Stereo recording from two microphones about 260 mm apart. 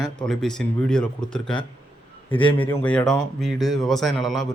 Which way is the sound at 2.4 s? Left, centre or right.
Centre.